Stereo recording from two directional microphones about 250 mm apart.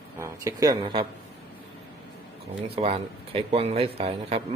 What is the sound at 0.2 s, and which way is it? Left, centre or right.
Speech, centre.